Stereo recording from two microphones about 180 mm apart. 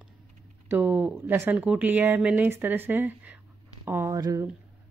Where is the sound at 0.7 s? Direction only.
10° right (ahead or behind).